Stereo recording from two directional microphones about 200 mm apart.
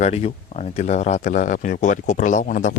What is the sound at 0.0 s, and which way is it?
Speech, 30° left (ahead or behind).